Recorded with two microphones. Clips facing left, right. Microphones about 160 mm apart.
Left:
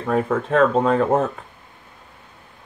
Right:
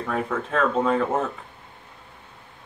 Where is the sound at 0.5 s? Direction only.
45° left (ahead or behind).